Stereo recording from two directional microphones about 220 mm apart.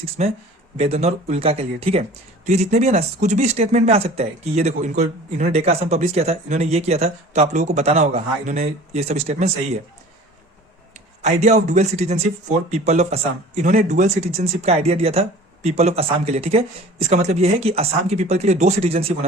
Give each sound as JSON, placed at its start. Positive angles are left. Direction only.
{"t": 0.2, "sound": "speech", "side_deg": -30}
{"t": 11.2, "sound": "speech", "side_deg": -30}